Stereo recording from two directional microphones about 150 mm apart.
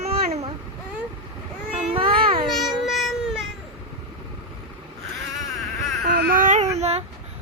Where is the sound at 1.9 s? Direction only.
35° right (ahead or behind).